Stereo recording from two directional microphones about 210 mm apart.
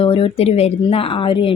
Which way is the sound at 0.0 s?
25° left (ahead or behind).